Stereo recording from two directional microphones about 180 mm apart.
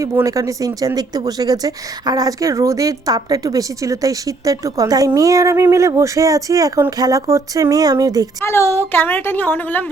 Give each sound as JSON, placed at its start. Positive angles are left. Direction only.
{"t": 0.0, "sound": "speech", "side_deg": -20}
{"t": 8.4, "sound": "a woman's voice", "side_deg": 15}